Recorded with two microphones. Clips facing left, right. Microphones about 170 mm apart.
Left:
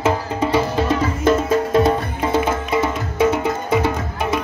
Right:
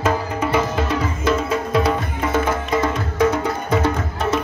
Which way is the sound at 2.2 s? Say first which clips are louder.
Left 1 dB; 30° left (ahead or behind).